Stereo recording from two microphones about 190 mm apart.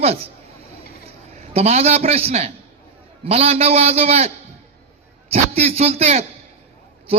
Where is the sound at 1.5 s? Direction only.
35° right (ahead or behind).